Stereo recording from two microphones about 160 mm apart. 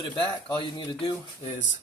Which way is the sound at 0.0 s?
30° left (ahead or behind).